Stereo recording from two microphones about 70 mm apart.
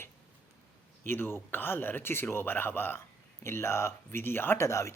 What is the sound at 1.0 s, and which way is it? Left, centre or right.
Speech, left.